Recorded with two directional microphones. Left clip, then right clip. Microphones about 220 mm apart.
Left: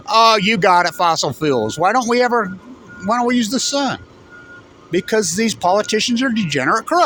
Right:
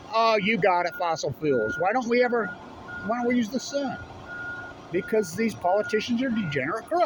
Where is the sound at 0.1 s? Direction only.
45° left (ahead or behind).